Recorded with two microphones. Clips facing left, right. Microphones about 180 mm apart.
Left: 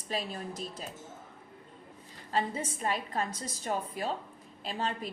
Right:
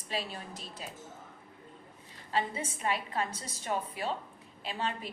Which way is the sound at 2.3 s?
40° left (ahead or behind).